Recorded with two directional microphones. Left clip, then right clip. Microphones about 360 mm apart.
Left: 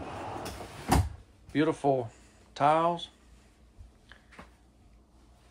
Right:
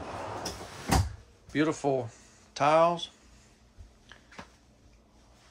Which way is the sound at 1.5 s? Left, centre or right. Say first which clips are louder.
Left 1 dB; centre.